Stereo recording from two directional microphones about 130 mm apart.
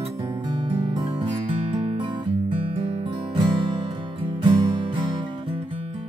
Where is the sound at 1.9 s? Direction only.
40° right (ahead or behind).